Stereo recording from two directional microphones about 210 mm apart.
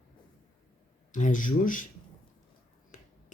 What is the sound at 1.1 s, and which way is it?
Speech, 40° left (ahead or behind).